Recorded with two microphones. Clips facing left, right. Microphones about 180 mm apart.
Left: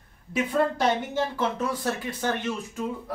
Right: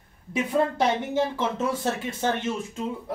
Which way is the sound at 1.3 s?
25° right (ahead or behind).